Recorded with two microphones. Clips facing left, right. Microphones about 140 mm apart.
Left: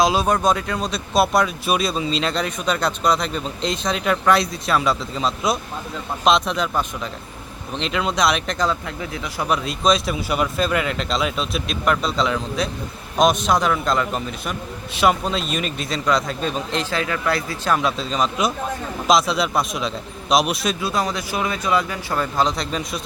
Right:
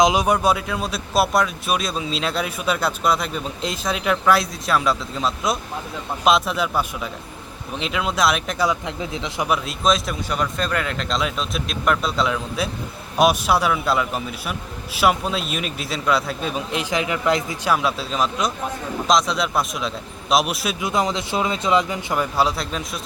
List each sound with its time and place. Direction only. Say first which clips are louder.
0.0 s speech: right 1 dB; 15° right (ahead or behind)
8.9 s speech: right 1 dB; 20° right (ahead or behind)
9.5 s a man's voice: left 2 dB; centre (ahead or behind); by 17.7 s 20° right (ahead or behind)
17.7 s speech: left 1 dB; 5° right (ahead or behind)
20.8 s speech: right 5 dB; 20° right (ahead or behind); by 23.0 s centre (ahead or behind)